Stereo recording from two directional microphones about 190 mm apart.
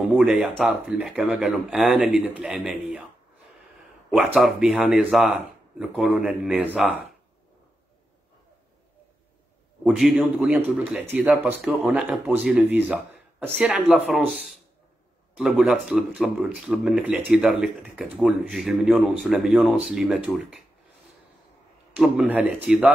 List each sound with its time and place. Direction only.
0.0 s speech: 10° right (ahead or behind)
4.1 s speech: 5° right (ahead or behind)
9.8 s speech: centre (ahead or behind)
21.9 s speech: 5° right (ahead or behind)